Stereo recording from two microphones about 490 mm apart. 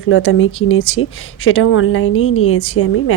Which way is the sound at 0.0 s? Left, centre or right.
Left.